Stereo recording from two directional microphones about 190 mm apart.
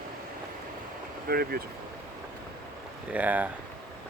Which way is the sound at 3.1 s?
10° right (ahead or behind).